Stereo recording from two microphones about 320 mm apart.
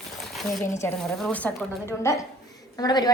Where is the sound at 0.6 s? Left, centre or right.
Left.